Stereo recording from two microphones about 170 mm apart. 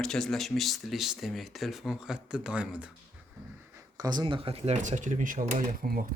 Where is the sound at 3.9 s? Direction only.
25° right (ahead or behind).